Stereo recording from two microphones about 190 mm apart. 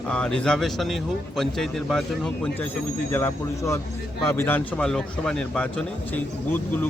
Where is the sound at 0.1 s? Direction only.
5° left (ahead or behind).